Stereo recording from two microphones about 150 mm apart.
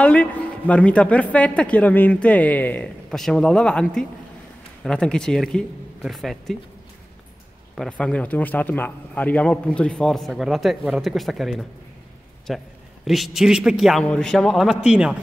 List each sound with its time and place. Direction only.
0.0 s speech: 10° left (ahead or behind)
7.7 s speech: 5° left (ahead or behind)